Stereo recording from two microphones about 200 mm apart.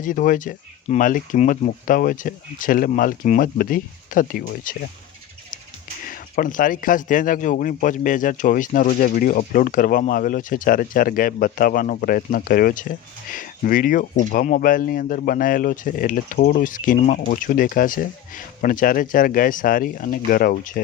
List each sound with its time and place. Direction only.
0.0 s speech: 40° left (ahead or behind)
6.1 s speech: 45° left (ahead or behind)